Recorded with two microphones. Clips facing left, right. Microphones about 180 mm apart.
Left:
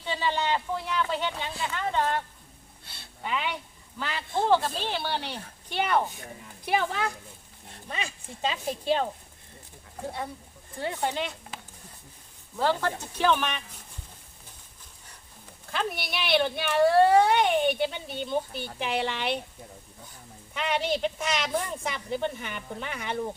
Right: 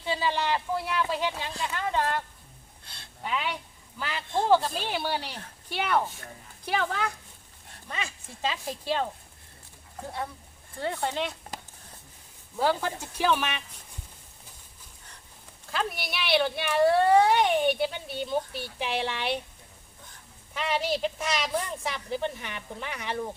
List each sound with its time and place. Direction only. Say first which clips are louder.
0.0 s a woman's voice: even; 10° right (ahead or behind)
2.8 s a sound: left 1 dB; 5° left (ahead or behind)
4.4 s speech: right 1 dB; 5° right (ahead or behind)
8.4 s speech: left 2 dB; 20° left (ahead or behind)
10.8 s speech: even; 15° left (ahead or behind)
11.1 s a woman's voice: right 1 dB; centre (ahead or behind)
12.5 s speech: even; 10° right (ahead or behind)
15.7 s a woman's voice: left 1 dB; centre (ahead or behind)
20.5 s a woman's voice: left 1 dB; centre (ahead or behind)